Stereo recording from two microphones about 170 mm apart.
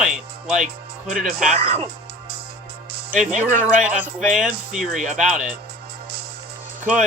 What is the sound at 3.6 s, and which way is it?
Speech, 5° right (ahead or behind).